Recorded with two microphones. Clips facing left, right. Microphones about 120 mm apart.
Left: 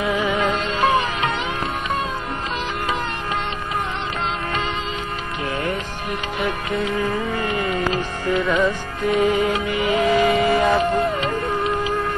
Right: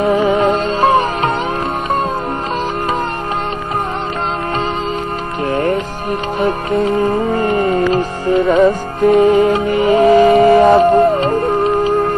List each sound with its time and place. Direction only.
0.0 s music: 45° right (ahead or behind)
6.4 s speech: 40° right (ahead or behind)
8.3 s music: 30° right (ahead or behind)
8.6 s music: 45° right (ahead or behind)
10.2 s a sound: 45° right (ahead or behind)
10.7 s music: 45° right (ahead or behind)
11.0 s music: 35° right (ahead or behind)